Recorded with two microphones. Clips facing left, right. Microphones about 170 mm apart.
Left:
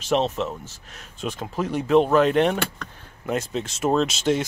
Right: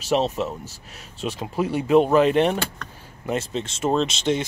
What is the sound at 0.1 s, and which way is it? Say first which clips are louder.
Speech: even; 5° right (ahead or behind).